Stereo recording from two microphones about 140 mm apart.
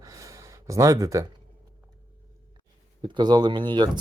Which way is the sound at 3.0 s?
30° right (ahead or behind).